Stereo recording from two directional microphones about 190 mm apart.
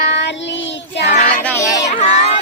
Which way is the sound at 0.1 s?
65° left (ahead or behind).